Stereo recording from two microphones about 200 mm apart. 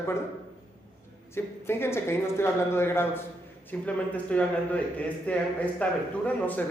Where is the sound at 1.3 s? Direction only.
10° left (ahead or behind).